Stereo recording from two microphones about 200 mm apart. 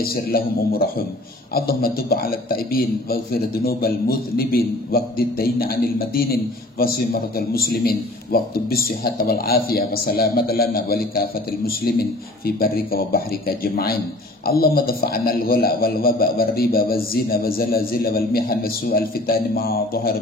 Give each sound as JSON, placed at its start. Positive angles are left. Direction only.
{"t": 0.0, "sound": "a man's voice", "side_deg": 50}